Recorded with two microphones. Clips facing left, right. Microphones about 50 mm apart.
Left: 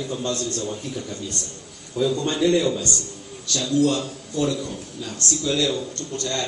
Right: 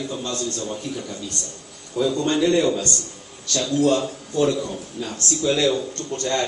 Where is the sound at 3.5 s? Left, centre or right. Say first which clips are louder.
Right 1 dB; right.